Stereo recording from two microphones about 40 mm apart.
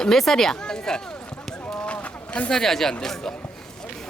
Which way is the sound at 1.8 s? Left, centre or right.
Left.